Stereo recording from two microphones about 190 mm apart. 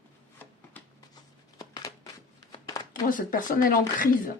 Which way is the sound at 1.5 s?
20° left (ahead or behind).